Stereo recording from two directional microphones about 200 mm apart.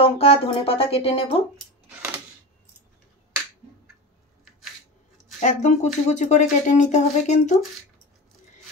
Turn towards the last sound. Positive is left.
turn(degrees=35)  # may be behind; listen again after turning